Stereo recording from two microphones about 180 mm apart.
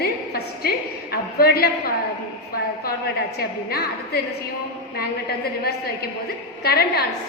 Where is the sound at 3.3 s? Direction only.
60° left (ahead or behind).